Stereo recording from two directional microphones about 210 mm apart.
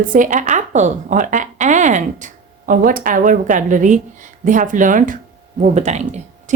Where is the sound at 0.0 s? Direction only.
40° right (ahead or behind).